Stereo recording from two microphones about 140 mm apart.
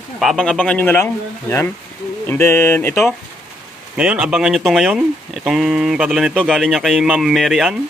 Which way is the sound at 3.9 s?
5° right (ahead or behind).